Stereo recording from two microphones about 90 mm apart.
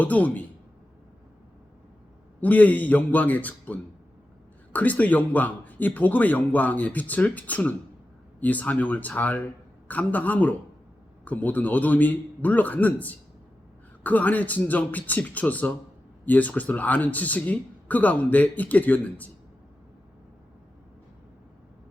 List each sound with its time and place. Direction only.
0.0 s speech: 15° left (ahead or behind)
2.4 s speech: 15° left (ahead or behind)